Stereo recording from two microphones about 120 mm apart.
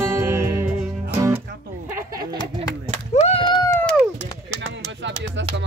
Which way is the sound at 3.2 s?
60° left (ahead or behind).